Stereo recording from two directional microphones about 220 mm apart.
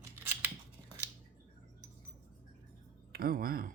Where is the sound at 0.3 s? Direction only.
10° right (ahead or behind).